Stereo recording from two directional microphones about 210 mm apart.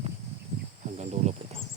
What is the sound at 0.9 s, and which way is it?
Cricket, 30° right (ahead or behind).